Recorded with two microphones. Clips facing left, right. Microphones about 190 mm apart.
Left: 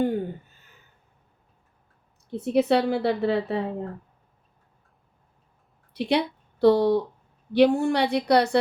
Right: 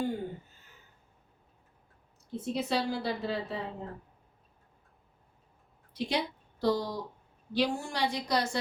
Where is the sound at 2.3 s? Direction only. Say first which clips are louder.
Left 10 dB; 60° left (ahead or behind).